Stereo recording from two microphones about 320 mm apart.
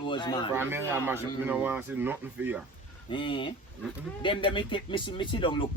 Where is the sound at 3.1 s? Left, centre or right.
Centre.